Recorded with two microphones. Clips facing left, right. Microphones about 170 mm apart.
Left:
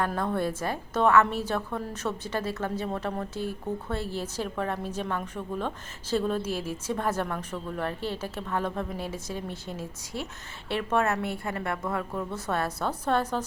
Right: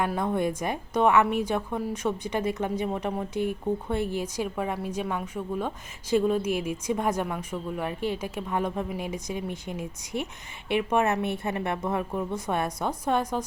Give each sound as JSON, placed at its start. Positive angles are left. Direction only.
{"t": 0.0, "sound": "a woman's voice", "side_deg": -15}